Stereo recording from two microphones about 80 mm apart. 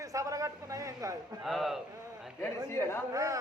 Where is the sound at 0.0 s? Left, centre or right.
Right.